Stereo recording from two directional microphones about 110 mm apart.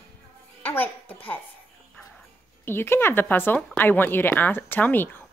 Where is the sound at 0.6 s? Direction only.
20° left (ahead or behind).